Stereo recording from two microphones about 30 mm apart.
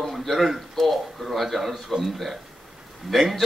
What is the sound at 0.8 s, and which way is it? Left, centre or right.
Speech, centre.